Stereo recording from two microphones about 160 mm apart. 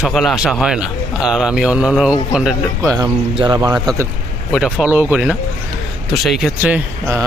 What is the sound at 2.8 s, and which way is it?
Speech, 20° right (ahead or behind).